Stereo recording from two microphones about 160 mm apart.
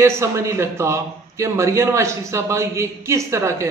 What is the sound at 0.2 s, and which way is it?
A man's voice, 20° right (ahead or behind).